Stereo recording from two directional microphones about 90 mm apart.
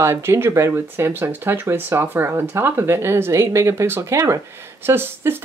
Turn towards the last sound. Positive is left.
turn(degrees=-25)  # may be behind; listen again after turning